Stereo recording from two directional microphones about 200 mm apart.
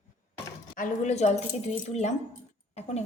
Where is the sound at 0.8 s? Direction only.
35° left (ahead or behind).